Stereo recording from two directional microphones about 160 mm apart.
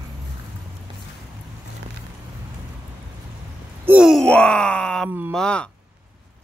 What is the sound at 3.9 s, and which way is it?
Groan, 5° right (ahead or behind).